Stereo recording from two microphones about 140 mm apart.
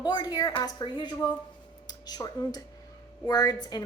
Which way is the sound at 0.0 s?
30° left (ahead or behind).